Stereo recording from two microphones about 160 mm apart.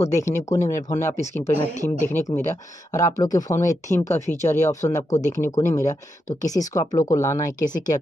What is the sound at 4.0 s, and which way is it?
Speech, 45° left (ahead or behind).